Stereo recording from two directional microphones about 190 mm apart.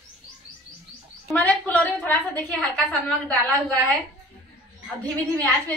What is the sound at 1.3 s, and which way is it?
A woman's voice, 10° left (ahead or behind).